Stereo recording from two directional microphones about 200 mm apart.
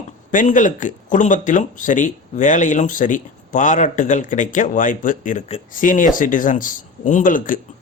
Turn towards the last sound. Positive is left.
turn(degrees=40)  # may be behind; listen again after turning